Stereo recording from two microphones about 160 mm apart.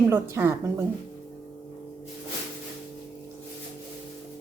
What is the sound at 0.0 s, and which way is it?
Speech, 15° right (ahead or behind).